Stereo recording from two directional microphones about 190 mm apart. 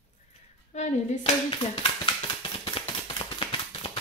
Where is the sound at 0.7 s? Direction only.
40° left (ahead or behind).